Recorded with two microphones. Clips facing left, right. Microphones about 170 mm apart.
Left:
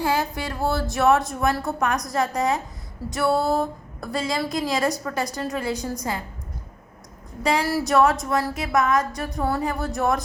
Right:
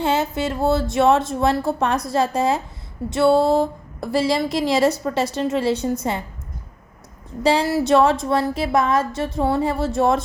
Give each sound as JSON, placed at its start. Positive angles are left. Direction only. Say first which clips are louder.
{"t": 0.0, "sound": "a woman's voice", "louder": "right 4 dB", "side_deg": -25}
{"t": 7.4, "sound": "a woman's voice", "louder": "right 4 dB", "side_deg": -30}